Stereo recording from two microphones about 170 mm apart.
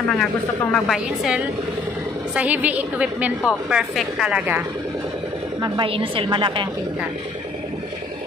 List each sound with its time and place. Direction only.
0.2 s a woman's voice: 5° left (ahead or behind)
5.6 s a woman's voice: 30° right (ahead or behind)